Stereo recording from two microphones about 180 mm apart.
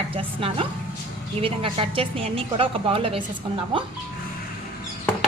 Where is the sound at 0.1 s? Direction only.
30° right (ahead or behind).